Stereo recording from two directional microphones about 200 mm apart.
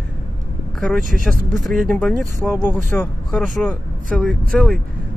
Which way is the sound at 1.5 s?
Centre (ahead or behind).